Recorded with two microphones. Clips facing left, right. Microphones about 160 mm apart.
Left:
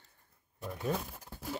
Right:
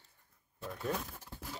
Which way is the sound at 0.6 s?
15° left (ahead or behind).